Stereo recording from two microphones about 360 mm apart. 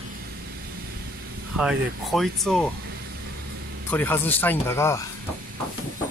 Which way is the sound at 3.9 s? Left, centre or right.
Centre.